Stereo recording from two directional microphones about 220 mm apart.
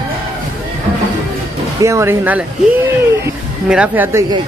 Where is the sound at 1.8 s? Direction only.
10° right (ahead or behind).